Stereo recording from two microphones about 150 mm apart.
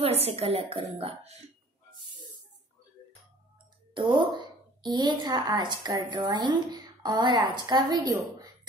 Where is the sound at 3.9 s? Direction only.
35° right (ahead or behind).